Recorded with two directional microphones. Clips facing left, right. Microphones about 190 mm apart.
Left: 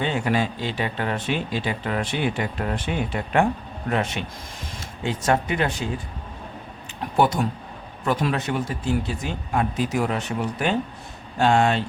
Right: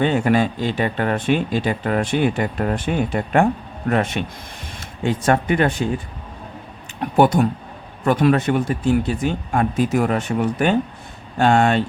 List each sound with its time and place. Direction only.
0.0 s speech: 50° right (ahead or behind)
7.2 s speech: 55° right (ahead or behind)